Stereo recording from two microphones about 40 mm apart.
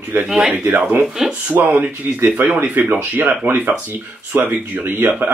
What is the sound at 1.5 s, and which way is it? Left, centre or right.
Speech, right.